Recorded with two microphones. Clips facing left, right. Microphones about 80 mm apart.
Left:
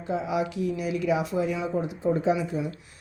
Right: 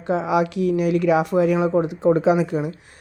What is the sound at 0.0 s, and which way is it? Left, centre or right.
Speech, right.